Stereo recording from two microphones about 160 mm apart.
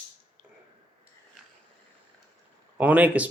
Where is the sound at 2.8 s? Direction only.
10° right (ahead or behind).